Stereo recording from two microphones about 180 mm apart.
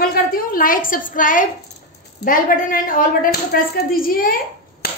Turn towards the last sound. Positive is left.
turn(degrees=60)  # may be behind; listen again after turning